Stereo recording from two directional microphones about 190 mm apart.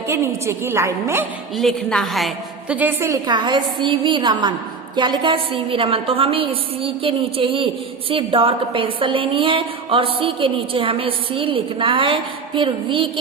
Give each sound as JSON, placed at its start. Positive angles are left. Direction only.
{"t": 0.1, "sound": "a woman's voice", "side_deg": -15}
{"t": 1.5, "sound": "a woman's voice", "side_deg": 0}